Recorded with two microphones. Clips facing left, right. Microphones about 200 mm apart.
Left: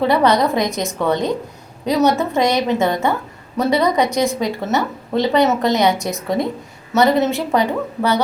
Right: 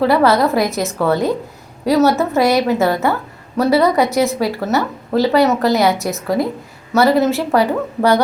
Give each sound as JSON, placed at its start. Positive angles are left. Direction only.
{"t": 0.0, "sound": "a woman's voice", "side_deg": 0}
{"t": 1.9, "sound": "a woman's voice", "side_deg": 20}
{"t": 2.1, "sound": "a woman's voice", "side_deg": -5}